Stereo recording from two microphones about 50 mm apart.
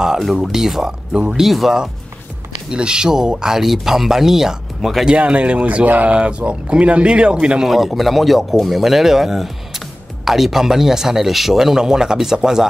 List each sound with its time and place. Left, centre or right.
0.2 s speech: centre
1.5 s speech: centre
2.7 s speech: centre
5.0 s speech: right
7.6 s speech: centre